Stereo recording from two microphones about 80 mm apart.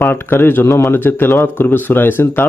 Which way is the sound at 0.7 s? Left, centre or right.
Left.